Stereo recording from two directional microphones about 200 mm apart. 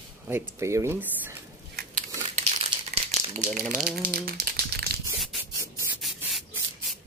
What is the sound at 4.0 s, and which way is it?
Crumpling, 50° right (ahead or behind).